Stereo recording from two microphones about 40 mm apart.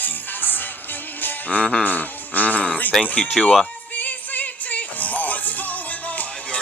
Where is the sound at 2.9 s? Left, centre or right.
Centre.